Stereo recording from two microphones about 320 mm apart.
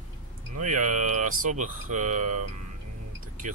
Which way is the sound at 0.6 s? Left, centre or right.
Right.